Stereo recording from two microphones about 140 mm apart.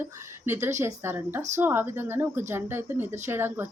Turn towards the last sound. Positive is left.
turn(degrees=-15)  # may be behind; listen again after turning